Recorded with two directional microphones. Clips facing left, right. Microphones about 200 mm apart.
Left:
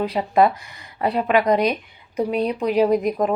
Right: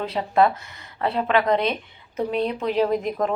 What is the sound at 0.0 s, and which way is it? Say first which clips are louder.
Speech: left 2 dB; 15° left (ahead or behind).